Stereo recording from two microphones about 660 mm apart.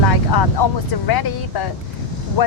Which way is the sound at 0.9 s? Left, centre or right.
Left.